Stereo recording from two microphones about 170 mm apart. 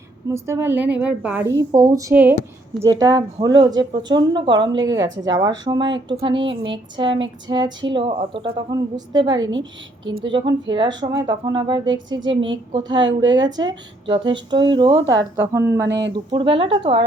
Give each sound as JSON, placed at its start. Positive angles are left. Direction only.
{"t": 0.3, "sound": "a woman's voice", "side_deg": -15}
{"t": 4.9, "sound": "a woman's voice", "side_deg": -90}
{"t": 5.2, "sound": "speech", "side_deg": -25}
{"t": 9.4, "sound": "a woman's voice", "side_deg": -90}
{"t": 10.3, "sound": "a woman's voice", "side_deg": -25}
{"t": 15.9, "sound": "a woman's voice", "side_deg": -90}
{"t": 16.1, "sound": "speech", "side_deg": -30}